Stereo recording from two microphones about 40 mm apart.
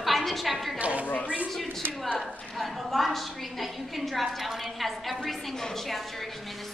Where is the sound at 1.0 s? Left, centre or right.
Left.